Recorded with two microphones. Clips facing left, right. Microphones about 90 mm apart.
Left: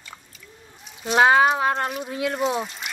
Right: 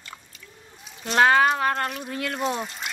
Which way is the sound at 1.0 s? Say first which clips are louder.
Left 2 dB; 10° left (ahead or behind).